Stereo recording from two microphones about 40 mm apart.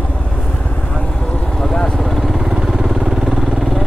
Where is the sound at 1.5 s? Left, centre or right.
Centre.